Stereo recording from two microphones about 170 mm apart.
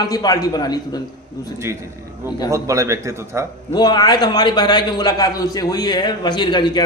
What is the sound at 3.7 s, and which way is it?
A man's voice, 25° left (ahead or behind).